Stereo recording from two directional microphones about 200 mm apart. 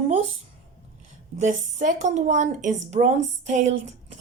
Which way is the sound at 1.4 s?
40° right (ahead or behind).